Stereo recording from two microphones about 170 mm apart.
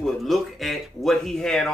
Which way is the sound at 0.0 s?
Centre (ahead or behind).